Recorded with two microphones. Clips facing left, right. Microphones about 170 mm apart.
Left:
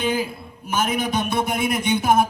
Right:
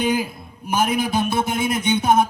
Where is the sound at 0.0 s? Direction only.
15° right (ahead or behind).